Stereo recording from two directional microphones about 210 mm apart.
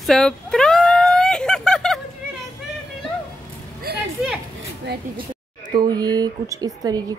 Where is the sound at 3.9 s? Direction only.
50° right (ahead or behind).